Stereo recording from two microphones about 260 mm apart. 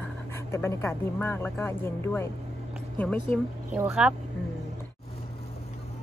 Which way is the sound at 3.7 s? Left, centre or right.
Centre.